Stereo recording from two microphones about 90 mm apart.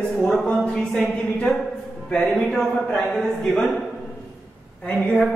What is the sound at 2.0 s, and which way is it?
Speech, 10° left (ahead or behind).